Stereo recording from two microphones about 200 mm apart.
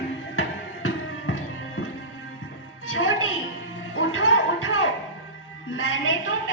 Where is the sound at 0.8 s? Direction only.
85° left.